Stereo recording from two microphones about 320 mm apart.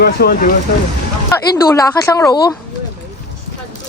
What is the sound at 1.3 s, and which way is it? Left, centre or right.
Speech, centre.